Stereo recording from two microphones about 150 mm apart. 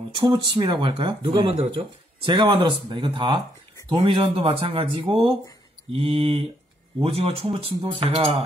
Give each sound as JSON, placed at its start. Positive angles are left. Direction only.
{"t": 0.1, "sound": "speech", "side_deg": -30}